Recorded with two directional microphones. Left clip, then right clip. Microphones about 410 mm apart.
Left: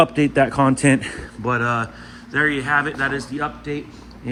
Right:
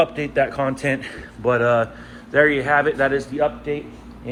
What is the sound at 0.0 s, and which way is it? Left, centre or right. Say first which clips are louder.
Speech: left 3 dB; centre.